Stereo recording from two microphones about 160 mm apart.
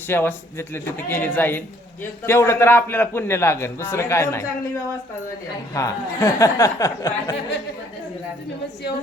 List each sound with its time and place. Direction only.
0.1 s a man's voice: 15° left (ahead or behind)
5.7 s speech: 20° left (ahead or behind)